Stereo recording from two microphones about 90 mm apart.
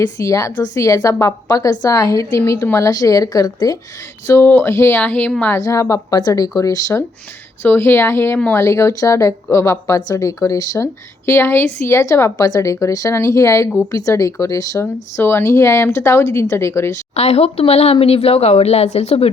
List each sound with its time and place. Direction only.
0.0 s a woman's voice: 40° left (ahead or behind)
4.3 s speech: 25° left (ahead or behind)
4.9 s a woman's voice: 15° left (ahead or behind)
5.5 s a woman's voice: 35° left (ahead or behind)
7.6 s a woman's voice: 25° left (ahead or behind); by 10.8 s 40° left (ahead or behind)
11.3 s a woman's voice: 25° left (ahead or behind)
14.8 s a woman's voice: 30° left (ahead or behind)
17.6 s a woman's voice: 90° left